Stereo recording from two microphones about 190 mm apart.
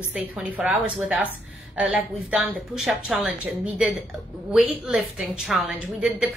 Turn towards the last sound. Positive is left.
turn(degrees=0)  # may be behind; listen again after turning